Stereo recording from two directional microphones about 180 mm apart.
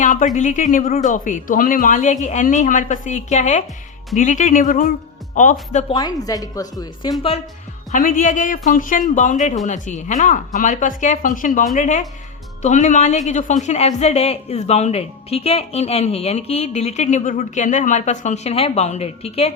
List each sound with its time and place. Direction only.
0.0 s a sound: 45° left (ahead or behind)
0.3 s speech: 45° left (ahead or behind)
5.9 s speech: 20° left (ahead or behind)
7.9 s a woman's voice: 50° left (ahead or behind)